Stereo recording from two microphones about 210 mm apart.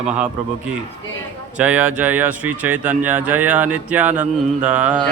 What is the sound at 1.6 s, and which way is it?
Speech, 5° right (ahead or behind).